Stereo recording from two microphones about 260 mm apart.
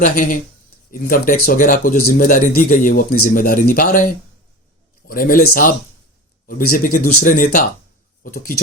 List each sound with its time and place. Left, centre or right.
0.0 s speech: left